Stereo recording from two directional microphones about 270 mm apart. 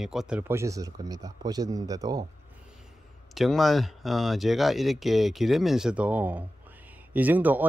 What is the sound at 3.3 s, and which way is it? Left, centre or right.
Speech, centre.